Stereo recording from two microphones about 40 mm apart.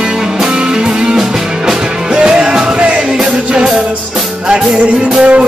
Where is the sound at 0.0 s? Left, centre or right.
Centre.